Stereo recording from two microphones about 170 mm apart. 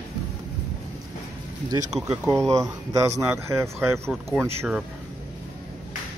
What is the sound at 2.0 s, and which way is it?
Speech, 15° right (ahead or behind).